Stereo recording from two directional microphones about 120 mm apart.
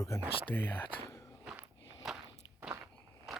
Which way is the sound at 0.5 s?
20° left (ahead or behind).